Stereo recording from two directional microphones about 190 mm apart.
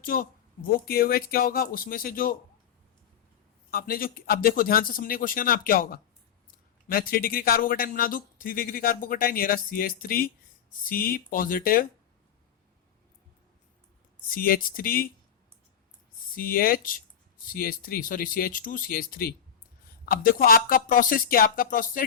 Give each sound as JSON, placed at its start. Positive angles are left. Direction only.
{"t": 0.0, "sound": "speech", "side_deg": 45}
{"t": 3.7, "sound": "speech", "side_deg": 50}
{"t": 14.3, "sound": "speech", "side_deg": 50}
{"t": 16.3, "sound": "speech", "side_deg": 50}